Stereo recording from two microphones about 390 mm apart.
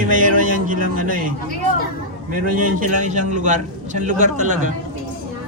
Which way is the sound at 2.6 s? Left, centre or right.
Centre.